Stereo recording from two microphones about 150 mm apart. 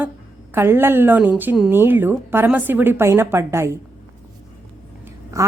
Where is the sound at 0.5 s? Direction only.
15° right (ahead or behind).